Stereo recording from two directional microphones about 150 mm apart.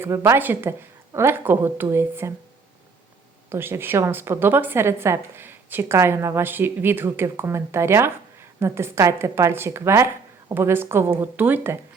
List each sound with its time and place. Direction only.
0.0 s a woman's voice: 20° right (ahead or behind)
3.5 s a woman's voice: 15° right (ahead or behind)